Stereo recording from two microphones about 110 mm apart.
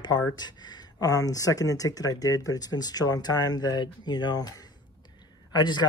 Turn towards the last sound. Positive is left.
turn(degrees=40)  # may be behind; listen again after turning